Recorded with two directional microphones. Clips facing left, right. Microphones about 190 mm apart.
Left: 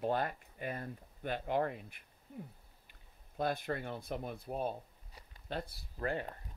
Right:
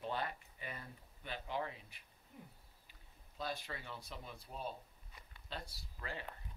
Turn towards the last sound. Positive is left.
turn(degrees=50)  # may be behind; listen again after turning